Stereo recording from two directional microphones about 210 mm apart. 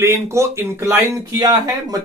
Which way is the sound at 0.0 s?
15° right (ahead or behind).